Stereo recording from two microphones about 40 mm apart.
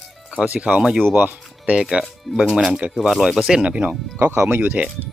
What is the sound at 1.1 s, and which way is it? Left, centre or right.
Speech, right.